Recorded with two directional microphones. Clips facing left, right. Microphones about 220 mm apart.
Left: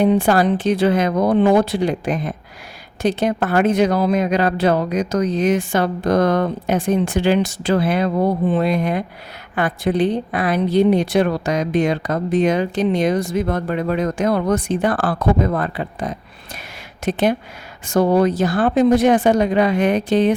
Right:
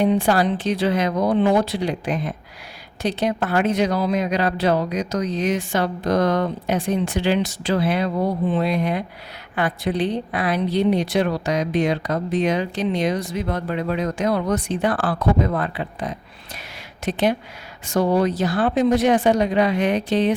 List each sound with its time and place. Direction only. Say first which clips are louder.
0.0 s a woman's voice: left 3 dB; 50° left (ahead or behind)